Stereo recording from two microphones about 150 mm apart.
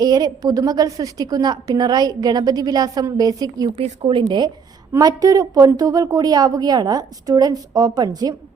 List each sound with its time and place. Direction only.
0.0 s a woman's voice: 25° right (ahead or behind)
3.8 s a woman's voice: 40° right (ahead or behind)